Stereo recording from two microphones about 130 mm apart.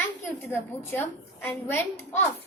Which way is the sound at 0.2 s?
15° left (ahead or behind).